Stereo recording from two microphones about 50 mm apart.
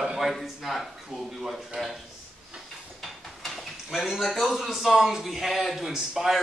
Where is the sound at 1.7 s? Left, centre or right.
Right.